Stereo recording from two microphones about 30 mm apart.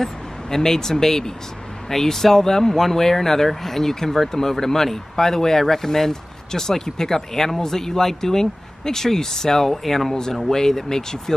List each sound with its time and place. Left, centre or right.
0.0 s speech: centre